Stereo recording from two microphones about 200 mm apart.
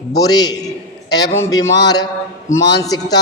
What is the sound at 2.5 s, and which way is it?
Speech, 60° left (ahead or behind).